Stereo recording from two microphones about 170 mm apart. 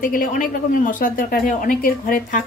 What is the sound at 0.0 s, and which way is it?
A woman's voice, 55° left (ahead or behind).